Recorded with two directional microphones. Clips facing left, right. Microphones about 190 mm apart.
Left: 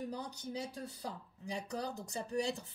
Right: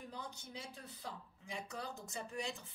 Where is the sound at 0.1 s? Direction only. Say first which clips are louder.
Left 7 dB; 40° left (ahead or behind).